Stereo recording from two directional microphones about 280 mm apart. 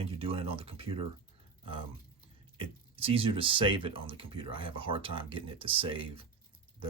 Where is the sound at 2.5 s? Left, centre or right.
Centre.